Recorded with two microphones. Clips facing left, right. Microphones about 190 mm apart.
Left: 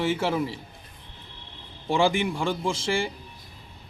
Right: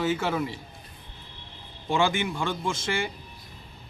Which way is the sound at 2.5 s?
30° left (ahead or behind).